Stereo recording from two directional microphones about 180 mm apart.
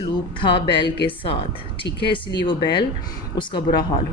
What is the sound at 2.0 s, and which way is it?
Speech, 25° left (ahead or behind).